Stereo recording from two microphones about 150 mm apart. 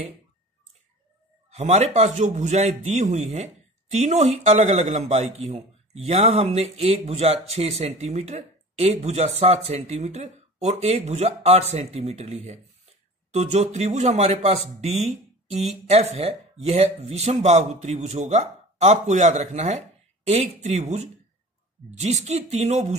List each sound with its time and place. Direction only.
1.5 s a man's voice: 45° right (ahead or behind)